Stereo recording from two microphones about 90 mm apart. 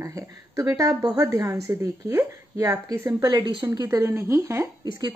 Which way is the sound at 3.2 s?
55° right (ahead or behind).